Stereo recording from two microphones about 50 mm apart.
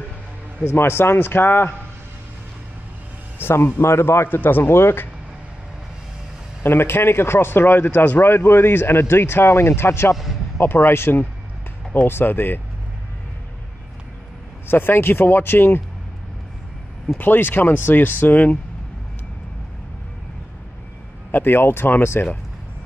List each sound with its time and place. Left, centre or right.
0.7 s speech: left
3.3 s speech: left
3.8 s a man's voice: left
4.4 s speech: left
6.6 s speech: left
14.7 s speech: left
17.2 s speech: left
21.3 s speech: left